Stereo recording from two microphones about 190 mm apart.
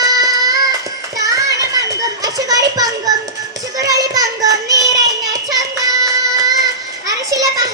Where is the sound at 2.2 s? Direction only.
20° right (ahead or behind).